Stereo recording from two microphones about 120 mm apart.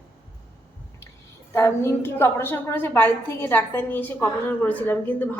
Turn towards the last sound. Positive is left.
turn(degrees=15)  # may be behind; listen again after turning